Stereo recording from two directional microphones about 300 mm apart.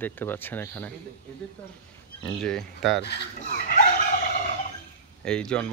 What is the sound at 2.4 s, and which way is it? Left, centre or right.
Speech, centre.